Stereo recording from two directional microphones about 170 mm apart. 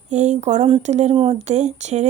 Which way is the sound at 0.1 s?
45° right (ahead or behind).